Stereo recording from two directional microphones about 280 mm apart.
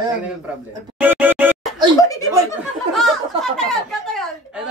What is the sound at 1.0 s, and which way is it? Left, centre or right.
Music, centre.